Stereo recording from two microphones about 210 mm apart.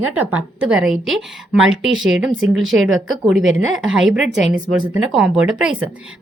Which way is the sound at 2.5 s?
65° right (ahead or behind).